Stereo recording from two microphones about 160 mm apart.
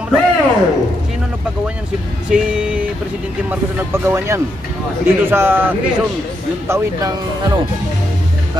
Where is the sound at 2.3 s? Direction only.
5° right (ahead or behind); by 7.6 s 25° right (ahead or behind).